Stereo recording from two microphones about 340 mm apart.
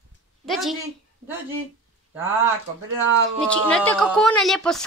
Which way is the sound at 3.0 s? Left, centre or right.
Right.